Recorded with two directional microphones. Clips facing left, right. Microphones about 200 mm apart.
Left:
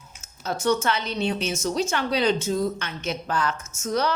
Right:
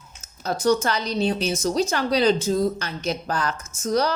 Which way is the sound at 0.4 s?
35° right (ahead or behind).